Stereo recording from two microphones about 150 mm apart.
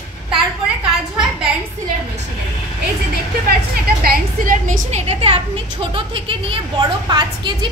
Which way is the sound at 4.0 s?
65° right (ahead or behind).